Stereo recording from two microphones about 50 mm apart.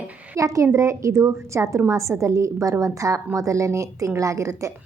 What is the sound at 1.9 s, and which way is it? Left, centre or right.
A woman's voice, right.